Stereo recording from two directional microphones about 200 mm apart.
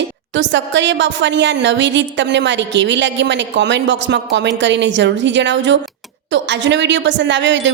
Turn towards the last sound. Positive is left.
turn(degrees=-65)  # may be behind; listen again after turning